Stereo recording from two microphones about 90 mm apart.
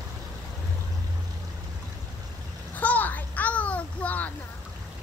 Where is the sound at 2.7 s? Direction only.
20° left (ahead or behind).